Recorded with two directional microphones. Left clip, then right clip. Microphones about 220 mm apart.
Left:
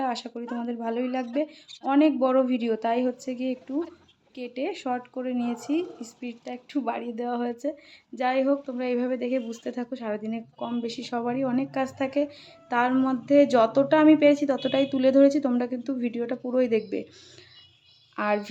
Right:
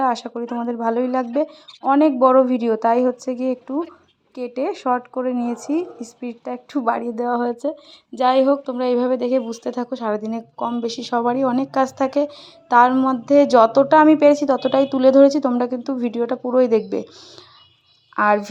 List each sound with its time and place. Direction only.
0.0 s a woman's voice: 20° right (ahead or behind)
4.5 s a woman's voice: 20° right (ahead or behind)
18.2 s a woman's voice: 10° right (ahead or behind)